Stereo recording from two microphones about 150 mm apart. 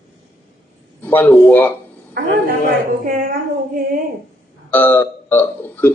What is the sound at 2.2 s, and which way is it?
A man's voice, 80° right.